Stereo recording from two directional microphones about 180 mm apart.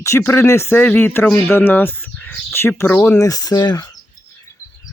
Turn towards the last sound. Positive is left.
turn(degrees=25)  # may be behind; listen again after turning